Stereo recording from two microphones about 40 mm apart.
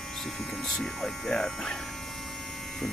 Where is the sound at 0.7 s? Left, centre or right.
Centre.